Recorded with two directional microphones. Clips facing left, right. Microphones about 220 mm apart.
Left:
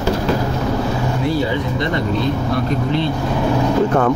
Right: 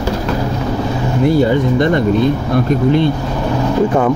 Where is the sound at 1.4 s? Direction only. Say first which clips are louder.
Right 7 dB; 50° right (ahead or behind).